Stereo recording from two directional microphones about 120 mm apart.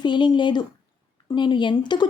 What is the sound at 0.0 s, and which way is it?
Speech, 40° left (ahead or behind).